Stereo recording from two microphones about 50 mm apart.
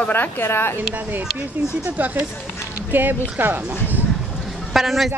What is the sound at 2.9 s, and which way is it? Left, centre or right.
Speech, right.